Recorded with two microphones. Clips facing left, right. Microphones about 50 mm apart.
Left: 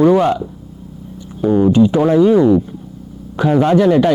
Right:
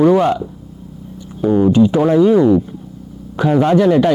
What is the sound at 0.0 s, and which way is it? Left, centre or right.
Speech, left.